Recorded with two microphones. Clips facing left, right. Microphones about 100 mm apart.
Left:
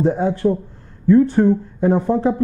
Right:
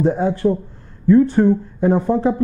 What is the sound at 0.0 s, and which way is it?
Speech, 20° right (ahead or behind).